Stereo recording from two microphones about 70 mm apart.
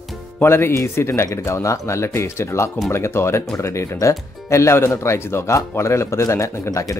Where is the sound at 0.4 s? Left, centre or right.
Left.